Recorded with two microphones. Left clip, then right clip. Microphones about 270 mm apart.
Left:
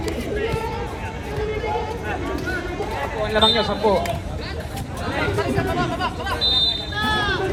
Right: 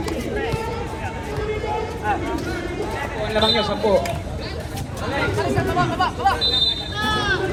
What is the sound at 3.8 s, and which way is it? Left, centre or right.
Speech, centre.